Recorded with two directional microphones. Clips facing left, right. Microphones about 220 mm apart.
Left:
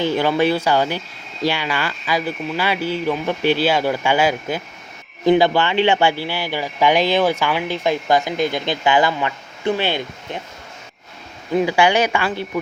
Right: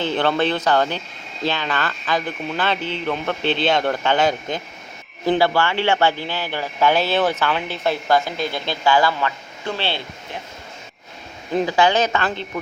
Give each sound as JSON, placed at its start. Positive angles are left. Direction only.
{"t": 0.0, "sound": "speech", "side_deg": 10}
{"t": 5.2, "sound": "speech", "side_deg": 20}
{"t": 11.6, "sound": "speech", "side_deg": 10}